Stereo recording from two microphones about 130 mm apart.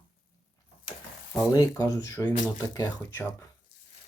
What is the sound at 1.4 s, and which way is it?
Speech, 25° left (ahead or behind).